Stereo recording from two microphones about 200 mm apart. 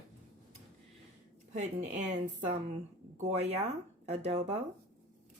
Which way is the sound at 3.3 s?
30° right (ahead or behind).